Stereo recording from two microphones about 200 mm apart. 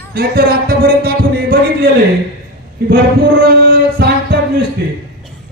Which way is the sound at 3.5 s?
50° right (ahead or behind).